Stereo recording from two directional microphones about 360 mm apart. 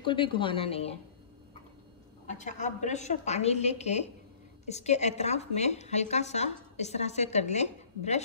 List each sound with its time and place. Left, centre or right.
0.0 s a woman's voice: centre
2.2 s a woman's voice: centre